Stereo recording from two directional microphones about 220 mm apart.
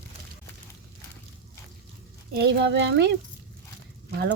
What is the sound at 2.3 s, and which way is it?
Speech, 50° right (ahead or behind).